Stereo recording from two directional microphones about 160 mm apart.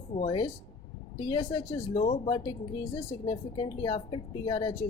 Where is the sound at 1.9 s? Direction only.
45° left (ahead or behind).